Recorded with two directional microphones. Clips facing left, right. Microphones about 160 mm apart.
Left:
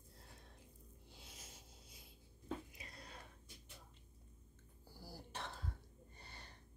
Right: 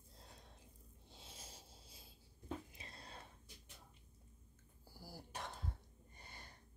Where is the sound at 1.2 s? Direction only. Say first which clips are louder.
Right 3 dB; 30° right (ahead or behind).